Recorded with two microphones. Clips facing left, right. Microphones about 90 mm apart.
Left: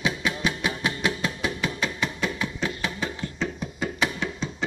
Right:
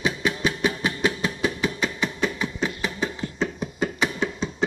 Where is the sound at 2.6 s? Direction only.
15° right (ahead or behind).